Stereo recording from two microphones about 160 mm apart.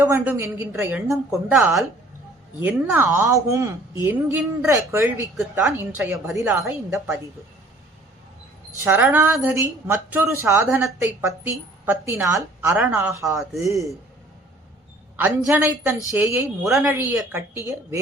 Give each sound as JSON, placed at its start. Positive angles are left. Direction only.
{"t": 0.0, "sound": "a woman's voice", "side_deg": -15}
{"t": 1.5, "sound": "a woman's voice", "side_deg": -5}
{"t": 8.8, "sound": "a woman's voice", "side_deg": -15}
{"t": 15.1, "sound": "a woman's voice", "side_deg": -10}